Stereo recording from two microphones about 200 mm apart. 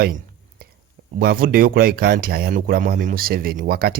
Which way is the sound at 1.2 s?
45° right (ahead or behind).